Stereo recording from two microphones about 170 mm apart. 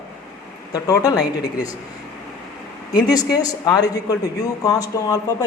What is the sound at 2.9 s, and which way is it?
Speech, 20° left (ahead or behind).